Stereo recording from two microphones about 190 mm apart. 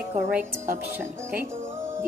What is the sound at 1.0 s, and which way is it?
Music, 10° right (ahead or behind).